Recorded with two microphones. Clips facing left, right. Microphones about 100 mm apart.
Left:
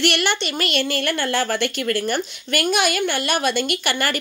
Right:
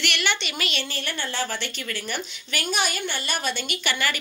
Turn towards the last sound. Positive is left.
turn(degrees=50)  # may be behind; listen again after turning